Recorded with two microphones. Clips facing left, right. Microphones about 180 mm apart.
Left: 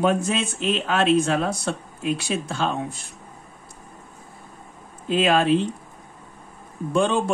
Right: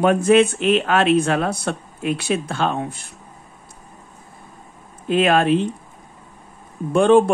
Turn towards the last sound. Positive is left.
turn(degrees=-55)  # may be behind; listen again after turning